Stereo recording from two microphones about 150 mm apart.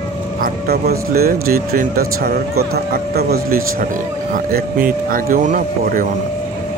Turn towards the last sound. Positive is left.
turn(degrees=-65)  # may be behind; listen again after turning